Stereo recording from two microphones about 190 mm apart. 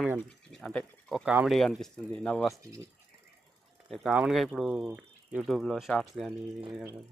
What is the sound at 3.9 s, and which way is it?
Speech, centre (ahead or behind).